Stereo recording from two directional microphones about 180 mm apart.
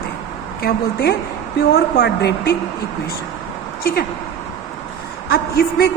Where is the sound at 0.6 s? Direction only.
65° left (ahead or behind).